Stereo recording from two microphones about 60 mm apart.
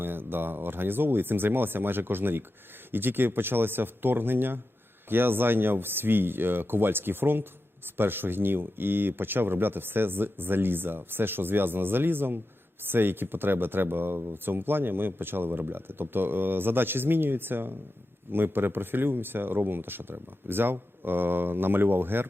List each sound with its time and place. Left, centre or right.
0.0 s speech: right